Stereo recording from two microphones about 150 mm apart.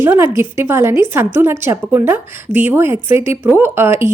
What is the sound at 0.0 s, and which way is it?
A woman's voice, 15° right (ahead or behind).